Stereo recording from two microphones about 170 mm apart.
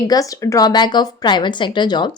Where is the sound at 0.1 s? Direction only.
20° left (ahead or behind).